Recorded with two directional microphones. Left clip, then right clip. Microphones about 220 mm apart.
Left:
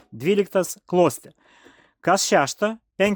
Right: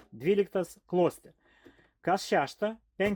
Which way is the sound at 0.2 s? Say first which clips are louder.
Left 7 dB; 50° left (ahead or behind).